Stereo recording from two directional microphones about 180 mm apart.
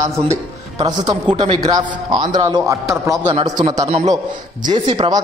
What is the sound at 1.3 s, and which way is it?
Speech, 25° right (ahead or behind).